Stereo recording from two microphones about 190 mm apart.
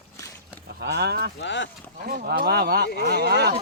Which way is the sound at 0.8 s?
60° right (ahead or behind).